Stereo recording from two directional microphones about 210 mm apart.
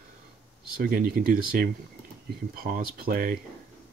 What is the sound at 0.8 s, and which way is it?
Speech, 45° right (ahead or behind).